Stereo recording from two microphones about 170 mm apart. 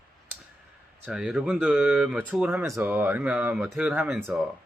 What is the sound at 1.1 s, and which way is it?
Speech, 5° right (ahead or behind).